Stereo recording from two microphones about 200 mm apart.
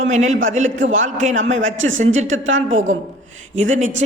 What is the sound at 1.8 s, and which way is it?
Speech, 70° right (ahead or behind).